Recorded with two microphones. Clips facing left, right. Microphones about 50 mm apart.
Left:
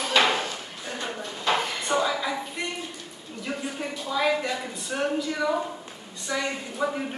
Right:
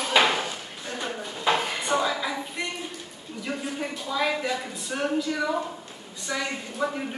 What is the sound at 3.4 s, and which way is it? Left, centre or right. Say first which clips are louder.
A woman's voice: right 1 dB; centre.